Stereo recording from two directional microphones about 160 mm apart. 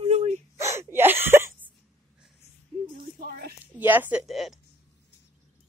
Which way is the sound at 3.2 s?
75° right (ahead or behind).